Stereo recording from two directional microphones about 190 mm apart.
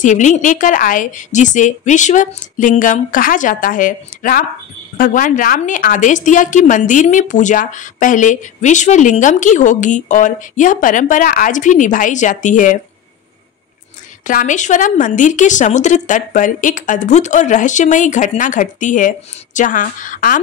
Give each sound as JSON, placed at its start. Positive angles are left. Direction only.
{"t": 0.0, "sound": "a woman's voice", "side_deg": 40}
{"t": 14.2, "sound": "a woman's voice", "side_deg": 40}